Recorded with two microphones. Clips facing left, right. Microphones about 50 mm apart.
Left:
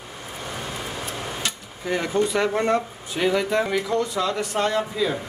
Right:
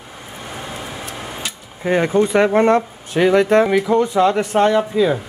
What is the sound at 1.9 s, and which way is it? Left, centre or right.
Speech, right.